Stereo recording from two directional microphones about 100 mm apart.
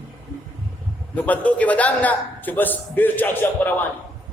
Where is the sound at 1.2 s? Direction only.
15° left (ahead or behind).